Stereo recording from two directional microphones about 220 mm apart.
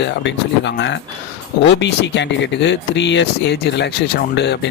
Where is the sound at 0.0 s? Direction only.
55° left (ahead or behind).